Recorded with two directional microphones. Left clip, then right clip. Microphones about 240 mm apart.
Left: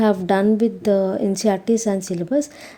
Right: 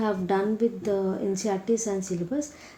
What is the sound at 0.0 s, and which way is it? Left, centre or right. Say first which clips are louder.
Speech: left 8 dB; left.